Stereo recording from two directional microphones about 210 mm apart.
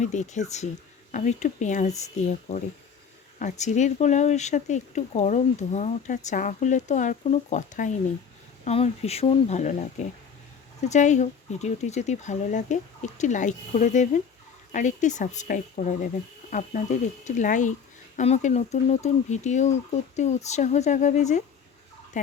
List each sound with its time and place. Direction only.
0.0 s speech: 35° left (ahead or behind)
3.3 s speech: 35° left (ahead or behind)
10.8 s speech: 35° left (ahead or behind)